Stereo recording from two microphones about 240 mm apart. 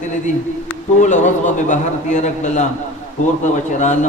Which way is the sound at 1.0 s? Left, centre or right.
Left.